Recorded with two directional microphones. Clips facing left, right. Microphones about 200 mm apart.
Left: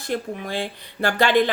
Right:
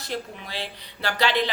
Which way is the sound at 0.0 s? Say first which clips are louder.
Left 6 dB; 50° left (ahead or behind).